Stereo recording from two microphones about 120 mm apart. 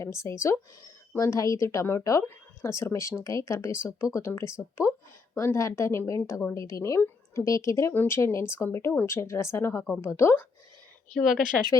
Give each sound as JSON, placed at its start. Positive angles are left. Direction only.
{"t": 0.0, "sound": "a woman's voice", "side_deg": 25}
{"t": 11.7, "sound": "speech", "side_deg": 30}